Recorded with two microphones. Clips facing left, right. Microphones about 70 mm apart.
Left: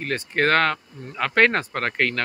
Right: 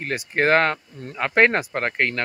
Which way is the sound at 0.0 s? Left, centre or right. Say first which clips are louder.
Even; centre.